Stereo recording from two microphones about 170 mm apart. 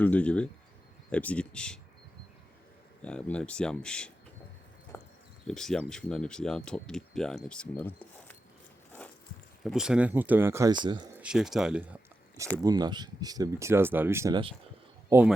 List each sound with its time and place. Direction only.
0.0 s speech: 10° left (ahead or behind)
3.0 s speech: 5° left (ahead or behind)
4.9 s a sound: 15° left (ahead or behind)
5.5 s speech: 5° left (ahead or behind)
9.6 s speech: 5° right (ahead or behind); by 11.1 s 25° right (ahead or behind)
11.1 s speech: 5° right (ahead or behind)
12.6 s speech: 25° right (ahead or behind)